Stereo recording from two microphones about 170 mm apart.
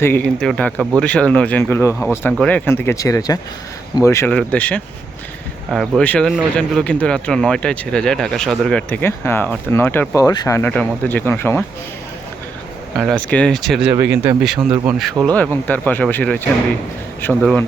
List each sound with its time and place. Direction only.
0.3 s speech: 5° left (ahead or behind)
1.9 s speech: 10° right (ahead or behind)
2.3 s speech: 5° left (ahead or behind)
6.0 s speech: 5° left (ahead or behind)
10.6 s speech: 5° left (ahead or behind)
13.0 s speech: 5° left (ahead or behind)
13.9 s speech: 15° right (ahead or behind)
15.1 s speech: 15° right (ahead or behind)
15.4 s speech: 10° left (ahead or behind)